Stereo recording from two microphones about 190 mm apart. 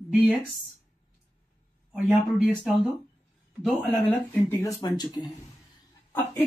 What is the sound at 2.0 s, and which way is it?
Speech, 5° right (ahead or behind).